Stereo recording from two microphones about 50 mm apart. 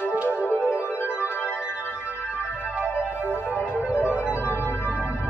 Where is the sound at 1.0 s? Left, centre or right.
Left.